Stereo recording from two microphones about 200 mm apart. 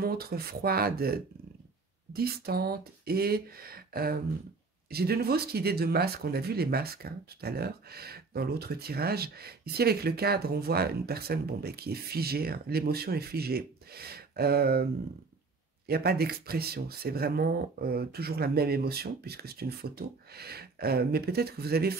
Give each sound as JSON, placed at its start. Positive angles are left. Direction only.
{"t": 0.0, "sound": "speech", "side_deg": -50}
{"t": 15.9, "sound": "speech", "side_deg": -50}